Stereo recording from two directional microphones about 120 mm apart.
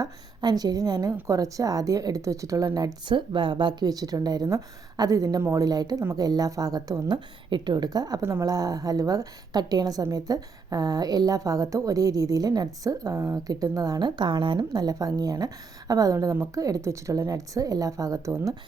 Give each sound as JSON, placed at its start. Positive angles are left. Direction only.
{"t": 0.0, "sound": "a woman's voice", "side_deg": -35}
{"t": 16.3, "sound": "a woman's voice", "side_deg": -20}